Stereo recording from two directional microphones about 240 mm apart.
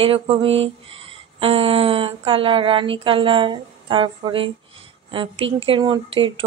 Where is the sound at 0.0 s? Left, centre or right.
Right.